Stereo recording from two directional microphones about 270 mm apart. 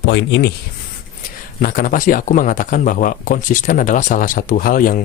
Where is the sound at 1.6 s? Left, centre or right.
Left.